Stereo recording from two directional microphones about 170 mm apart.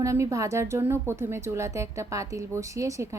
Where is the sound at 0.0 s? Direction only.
20° right (ahead or behind).